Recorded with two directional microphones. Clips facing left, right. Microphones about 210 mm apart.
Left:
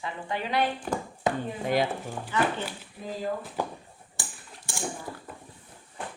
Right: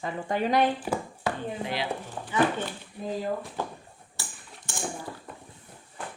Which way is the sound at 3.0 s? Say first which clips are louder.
Right 4 dB; centre (ahead or behind).